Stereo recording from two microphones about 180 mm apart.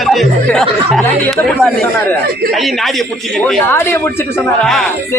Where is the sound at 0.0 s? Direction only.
Centre (ahead or behind).